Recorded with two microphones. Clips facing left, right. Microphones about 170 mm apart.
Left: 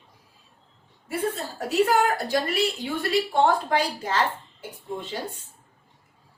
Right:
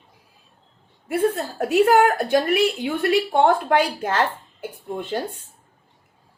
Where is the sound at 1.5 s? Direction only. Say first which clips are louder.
Right 5 dB; 60° right (ahead or behind).